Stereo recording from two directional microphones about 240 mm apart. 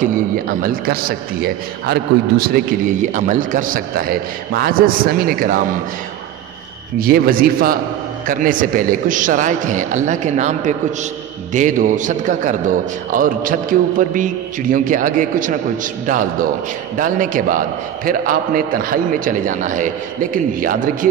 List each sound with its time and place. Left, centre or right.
0.0 s a man's voice: right
7.0 s a man's voice: right